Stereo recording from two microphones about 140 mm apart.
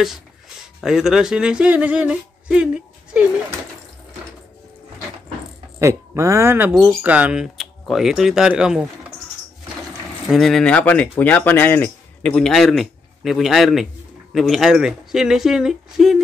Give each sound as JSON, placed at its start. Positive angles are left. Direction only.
{"t": 0.0, "sound": "speech", "side_deg": 0}
{"t": 5.8, "sound": "speech", "side_deg": -20}
{"t": 10.2, "sound": "speech", "side_deg": 0}